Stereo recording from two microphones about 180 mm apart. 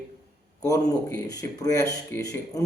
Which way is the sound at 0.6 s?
20° left (ahead or behind).